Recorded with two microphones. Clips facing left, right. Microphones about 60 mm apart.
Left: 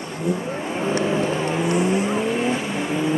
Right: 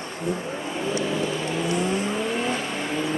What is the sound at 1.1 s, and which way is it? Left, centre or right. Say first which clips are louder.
Vehicle: left 4 dB; left.